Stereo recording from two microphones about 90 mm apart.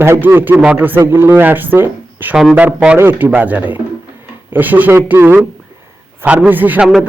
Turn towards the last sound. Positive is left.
turn(degrees=-20)  # may be behind; listen again after turning